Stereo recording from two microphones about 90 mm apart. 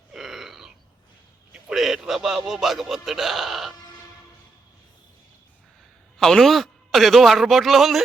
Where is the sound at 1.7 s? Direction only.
Centre (ahead or behind).